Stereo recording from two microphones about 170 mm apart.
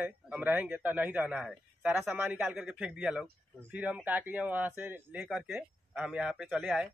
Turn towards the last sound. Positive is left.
turn(degrees=-5)  # may be behind; listen again after turning